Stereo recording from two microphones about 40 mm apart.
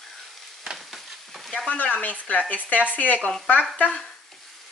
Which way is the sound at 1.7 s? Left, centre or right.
Left.